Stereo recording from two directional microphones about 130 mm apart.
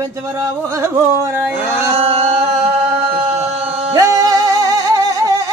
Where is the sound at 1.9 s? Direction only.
50° right (ahead or behind).